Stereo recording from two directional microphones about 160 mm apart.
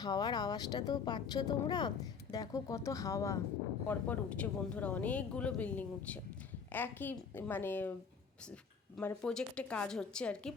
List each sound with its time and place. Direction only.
0.0 s speech: 25° left (ahead or behind)
3.8 s speech: 10° left (ahead or behind)
9.0 s speech: 5° left (ahead or behind)